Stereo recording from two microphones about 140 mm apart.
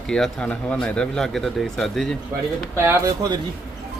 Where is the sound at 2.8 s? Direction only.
20° right (ahead or behind).